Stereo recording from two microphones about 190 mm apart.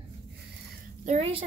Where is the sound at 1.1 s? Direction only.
30° right (ahead or behind).